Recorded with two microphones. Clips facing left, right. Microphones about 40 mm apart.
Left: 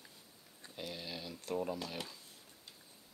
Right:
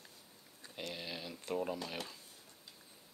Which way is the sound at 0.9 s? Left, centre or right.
Centre.